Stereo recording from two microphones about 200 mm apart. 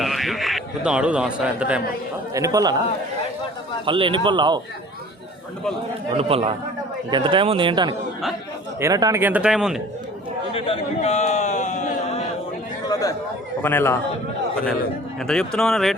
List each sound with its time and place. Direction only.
0.0 s a sound: centre (ahead or behind)
2.3 s speech: 15° right (ahead or behind)
3.8 s speech: 25° right (ahead or behind)
6.1 s speech: 30° right (ahead or behind); by 9.8 s 5° right (ahead or behind)
10.5 s a man's voice: 30° left (ahead or behind)
12.9 s a man's voice: 15° left (ahead or behind)
15.3 s speech: 5° left (ahead or behind)